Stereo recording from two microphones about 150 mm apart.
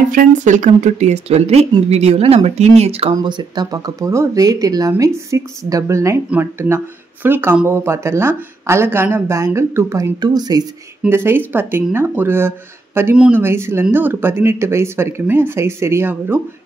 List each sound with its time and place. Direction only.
0.1 s speech: 60° right (ahead or behind); by 3.2 s 40° right (ahead or behind)
3.2 s a woman's voice: 30° right (ahead or behind)
11.0 s a woman's voice: 15° right (ahead or behind)